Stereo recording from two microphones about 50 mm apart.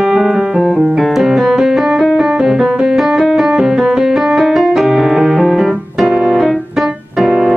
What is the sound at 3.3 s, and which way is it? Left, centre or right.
Music, centre.